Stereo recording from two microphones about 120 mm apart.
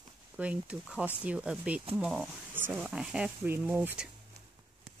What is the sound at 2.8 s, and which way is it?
Speech, 5° right (ahead or behind).